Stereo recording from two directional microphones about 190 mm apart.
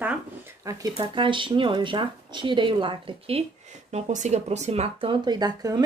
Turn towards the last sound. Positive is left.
turn(degrees=-20)  # may be behind; listen again after turning